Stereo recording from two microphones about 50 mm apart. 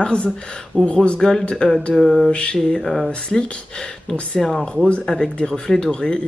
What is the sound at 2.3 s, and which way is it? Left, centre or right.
Speech, centre.